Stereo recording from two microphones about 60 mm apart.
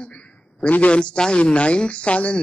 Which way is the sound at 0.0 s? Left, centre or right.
Centre.